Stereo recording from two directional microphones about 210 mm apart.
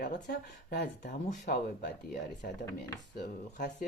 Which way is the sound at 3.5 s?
40° left (ahead or behind).